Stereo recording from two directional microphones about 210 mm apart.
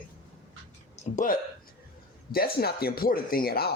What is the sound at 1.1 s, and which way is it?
Speech, 40° left (ahead or behind).